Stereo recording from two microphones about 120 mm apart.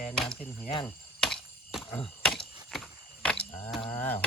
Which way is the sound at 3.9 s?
15° left (ahead or behind).